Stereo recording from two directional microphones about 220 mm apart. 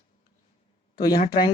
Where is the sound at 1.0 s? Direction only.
25° left (ahead or behind).